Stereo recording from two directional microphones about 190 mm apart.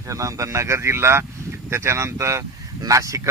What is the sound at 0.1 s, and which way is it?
Speech, 15° right (ahead or behind).